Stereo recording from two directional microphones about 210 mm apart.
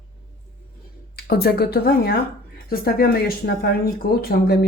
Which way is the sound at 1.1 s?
45° left (ahead or behind).